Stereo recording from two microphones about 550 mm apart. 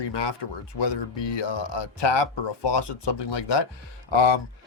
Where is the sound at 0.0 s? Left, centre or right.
Left.